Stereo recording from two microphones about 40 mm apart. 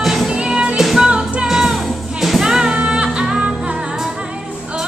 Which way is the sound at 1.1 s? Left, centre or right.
Right.